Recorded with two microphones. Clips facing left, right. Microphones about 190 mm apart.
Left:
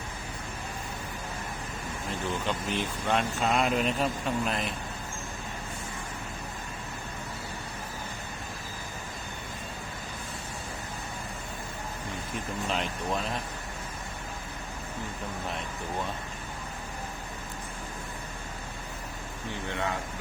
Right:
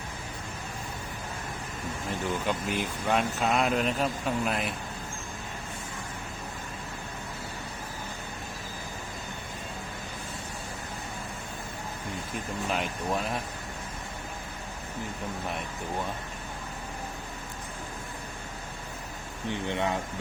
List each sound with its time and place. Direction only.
2.5 s speech: 10° right (ahead or behind)
12.7 s speech: 5° right (ahead or behind)
19.5 s speech: 20° right (ahead or behind)